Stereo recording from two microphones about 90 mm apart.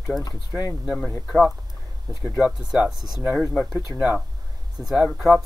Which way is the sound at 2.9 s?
50° right (ahead or behind).